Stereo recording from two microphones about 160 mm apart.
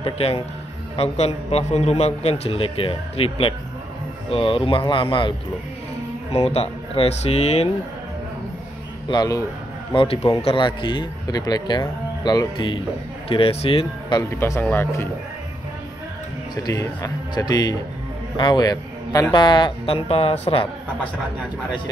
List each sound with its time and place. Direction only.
0.0 s a man's voice: 40° left (ahead or behind)
6.3 s a man's voice: 40° left (ahead or behind)
9.1 s a man's voice: 25° left (ahead or behind)
14.3 s speech: 15° left (ahead or behind)
16.6 s a man's voice: 20° left (ahead or behind)